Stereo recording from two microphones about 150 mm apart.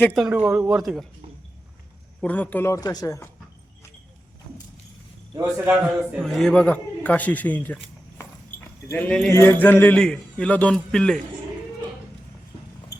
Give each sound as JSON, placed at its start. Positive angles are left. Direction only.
{"t": 0.0, "sound": "speech", "side_deg": 5}
{"t": 0.3, "sound": "speech", "side_deg": -10}
{"t": 2.2, "sound": "speech", "side_deg": 10}
{"t": 5.6, "sound": "speech", "side_deg": -10}
{"t": 6.2, "sound": "a man's voice", "side_deg": 5}
{"t": 8.9, "sound": "a man's voice", "side_deg": 15}